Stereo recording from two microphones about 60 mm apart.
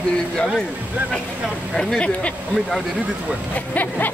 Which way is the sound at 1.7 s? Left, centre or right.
Centre.